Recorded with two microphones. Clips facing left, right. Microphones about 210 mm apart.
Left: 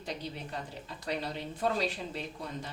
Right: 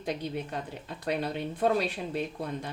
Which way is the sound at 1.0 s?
55° right (ahead or behind).